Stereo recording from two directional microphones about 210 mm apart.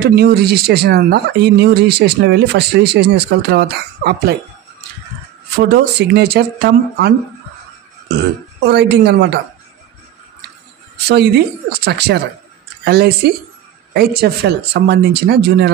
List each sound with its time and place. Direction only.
0.1 s speech: 50° right (ahead or behind)
5.6 s speech: 50° right (ahead or behind)
8.2 s speech: 50° right (ahead or behind)
11.1 s speech: 50° right (ahead or behind)